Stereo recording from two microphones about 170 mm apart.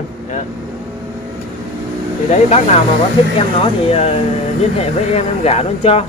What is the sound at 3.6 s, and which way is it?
Speech, 35° left (ahead or behind).